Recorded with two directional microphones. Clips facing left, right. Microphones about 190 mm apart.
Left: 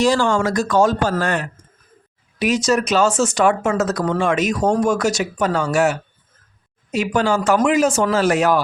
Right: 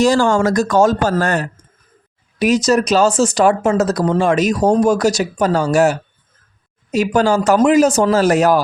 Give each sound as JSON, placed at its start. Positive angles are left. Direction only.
{"t": 0.0, "sound": "speech", "side_deg": -45}